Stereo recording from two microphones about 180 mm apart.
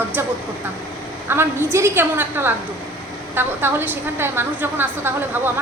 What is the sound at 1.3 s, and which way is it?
A woman's voice, 15° right (ahead or behind).